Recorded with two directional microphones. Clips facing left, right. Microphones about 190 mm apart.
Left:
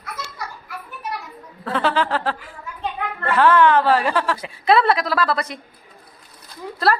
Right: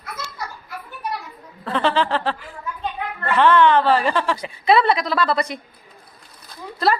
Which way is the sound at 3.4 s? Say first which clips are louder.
Even; 5° left (ahead or behind).